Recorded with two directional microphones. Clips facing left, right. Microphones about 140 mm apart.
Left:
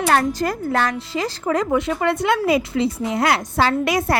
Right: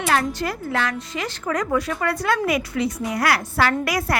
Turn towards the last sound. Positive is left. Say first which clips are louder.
# left 3 dB
turn(degrees=25)  # may be behind; listen again after turning